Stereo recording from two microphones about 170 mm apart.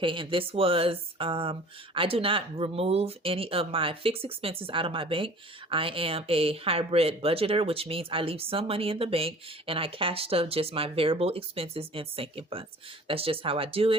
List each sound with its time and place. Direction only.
0.0 s speech: 30° right (ahead or behind)